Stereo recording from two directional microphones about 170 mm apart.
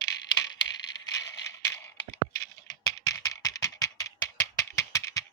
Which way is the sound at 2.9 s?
20° left (ahead or behind).